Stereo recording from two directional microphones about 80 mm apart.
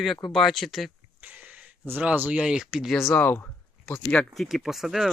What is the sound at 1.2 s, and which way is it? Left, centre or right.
Speech, centre.